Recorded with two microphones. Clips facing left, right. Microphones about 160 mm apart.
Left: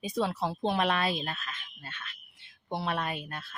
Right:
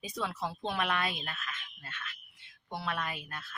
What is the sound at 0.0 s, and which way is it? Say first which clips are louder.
A woman's voice: left 6 dB; 25° left (ahead or behind).